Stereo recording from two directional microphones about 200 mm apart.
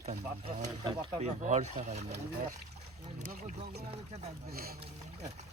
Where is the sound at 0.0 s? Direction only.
35° right (ahead or behind).